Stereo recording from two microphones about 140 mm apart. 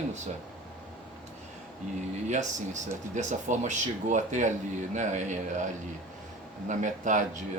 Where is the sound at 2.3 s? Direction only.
60° right (ahead or behind).